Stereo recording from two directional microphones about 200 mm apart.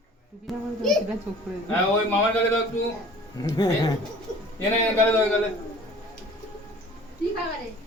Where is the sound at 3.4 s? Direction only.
20° left (ahead or behind).